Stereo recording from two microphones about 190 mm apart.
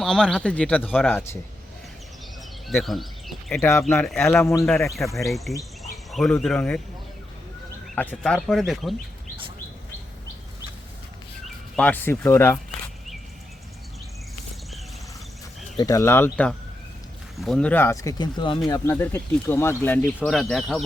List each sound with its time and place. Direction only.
0.0 s speech: 5° left (ahead or behind)
2.6 s speech: centre (ahead or behind)
3.6 s speech: 15° left (ahead or behind)
3.9 s speech: centre (ahead or behind)
4.3 s speech: 15° left (ahead or behind)
5.1 s speech: centre (ahead or behind)
5.8 s insect: centre (ahead or behind)
6.3 s speech: 5° left (ahead or behind)
7.9 s speech: 5° left (ahead or behind)
11.4 s speech: 5° left (ahead or behind)
15.8 s speech: 15° left (ahead or behind)
18.7 s speech: 15° left (ahead or behind)